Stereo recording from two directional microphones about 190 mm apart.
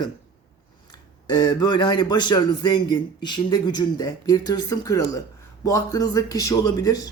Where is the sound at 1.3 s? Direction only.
20° left (ahead or behind).